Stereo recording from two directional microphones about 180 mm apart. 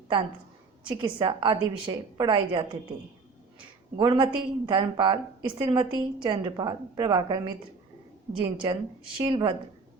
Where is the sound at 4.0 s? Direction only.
25° right (ahead or behind).